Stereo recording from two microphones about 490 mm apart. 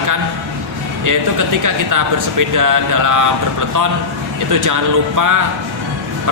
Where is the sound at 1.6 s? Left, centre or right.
Right.